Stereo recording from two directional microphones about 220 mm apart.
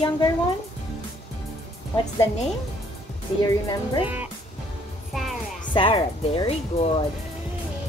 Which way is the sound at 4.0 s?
5° right (ahead or behind).